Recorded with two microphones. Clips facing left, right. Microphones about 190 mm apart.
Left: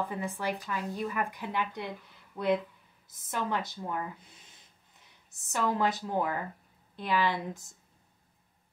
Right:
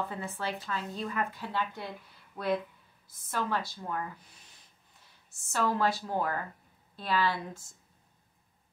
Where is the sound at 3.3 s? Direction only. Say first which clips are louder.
Even; 20° left (ahead or behind).